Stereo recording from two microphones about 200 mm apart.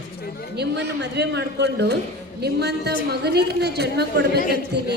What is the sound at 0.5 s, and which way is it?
A woman's voice, 55° right (ahead or behind).